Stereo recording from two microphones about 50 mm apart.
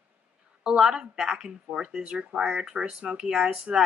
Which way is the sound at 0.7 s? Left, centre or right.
Centre.